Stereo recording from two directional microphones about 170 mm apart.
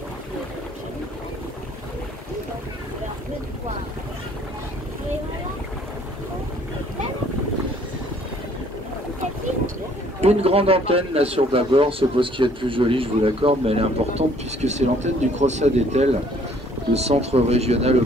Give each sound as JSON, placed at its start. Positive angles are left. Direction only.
{"t": 10.2, "sound": "a man's voice", "side_deg": -35}